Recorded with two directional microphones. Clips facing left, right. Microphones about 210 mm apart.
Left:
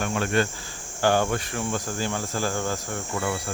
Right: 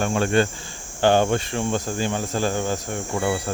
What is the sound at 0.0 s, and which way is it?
Speech, 30° right (ahead or behind).